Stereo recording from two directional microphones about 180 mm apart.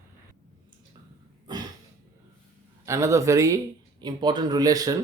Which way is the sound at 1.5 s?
25° right (ahead or behind).